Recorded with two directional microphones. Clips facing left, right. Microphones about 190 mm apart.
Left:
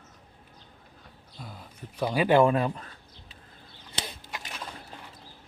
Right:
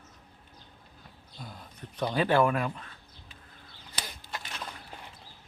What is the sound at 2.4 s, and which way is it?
Speech, 30° left (ahead or behind).